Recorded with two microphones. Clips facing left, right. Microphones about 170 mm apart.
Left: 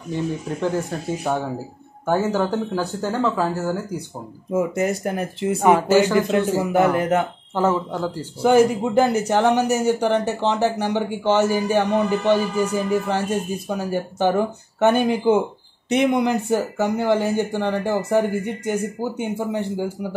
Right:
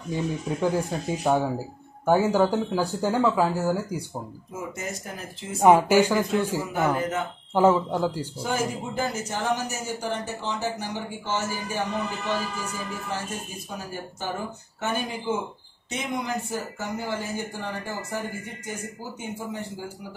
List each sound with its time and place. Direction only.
0.1 s speech: 10° right (ahead or behind)
4.5 s speech: 65° left (ahead or behind)
5.6 s speech: 10° right (ahead or behind)
6.7 s speech: 65° left (ahead or behind)
7.5 s speech: 15° right (ahead or behind)
8.4 s speech: 70° left (ahead or behind)